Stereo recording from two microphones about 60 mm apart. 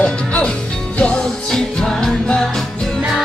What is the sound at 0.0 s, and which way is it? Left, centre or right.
Music, centre.